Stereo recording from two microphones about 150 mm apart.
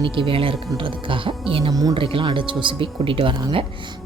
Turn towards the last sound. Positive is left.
turn(degrees=-35)  # may be behind; listen again after turning